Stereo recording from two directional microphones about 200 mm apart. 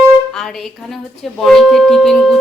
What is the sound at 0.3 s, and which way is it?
A woman's voice, centre (ahead or behind).